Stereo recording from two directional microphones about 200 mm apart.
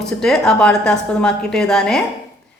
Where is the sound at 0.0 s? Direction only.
Centre (ahead or behind).